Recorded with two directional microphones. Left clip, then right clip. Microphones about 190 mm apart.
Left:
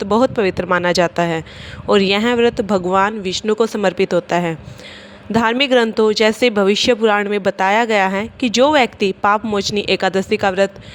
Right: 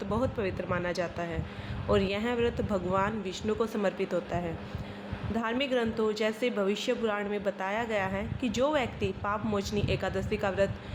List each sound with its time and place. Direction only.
0.0 s speech: 50° left (ahead or behind)